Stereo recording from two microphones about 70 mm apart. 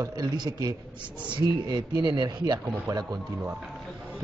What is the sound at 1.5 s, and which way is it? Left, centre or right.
Speech, right.